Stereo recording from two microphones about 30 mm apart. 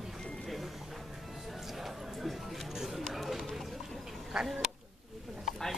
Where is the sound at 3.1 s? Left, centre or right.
Centre.